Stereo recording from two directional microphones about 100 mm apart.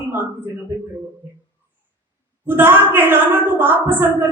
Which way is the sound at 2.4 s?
20° right (ahead or behind).